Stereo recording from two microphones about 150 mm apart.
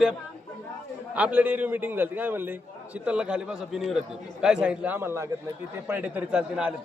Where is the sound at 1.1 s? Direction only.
10° right (ahead or behind).